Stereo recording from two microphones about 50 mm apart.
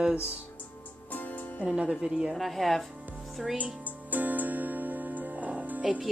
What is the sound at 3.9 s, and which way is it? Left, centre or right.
Music, right.